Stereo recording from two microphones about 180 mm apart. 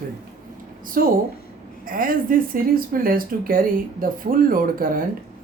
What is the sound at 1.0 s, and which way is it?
Speech, 55° right (ahead or behind).